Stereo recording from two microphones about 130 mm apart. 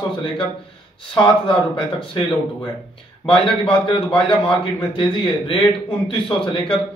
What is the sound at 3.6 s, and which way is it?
A man's voice, 40° left (ahead or behind).